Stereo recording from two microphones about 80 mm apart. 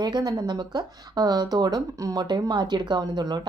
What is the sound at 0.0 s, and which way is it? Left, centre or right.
Speech, right.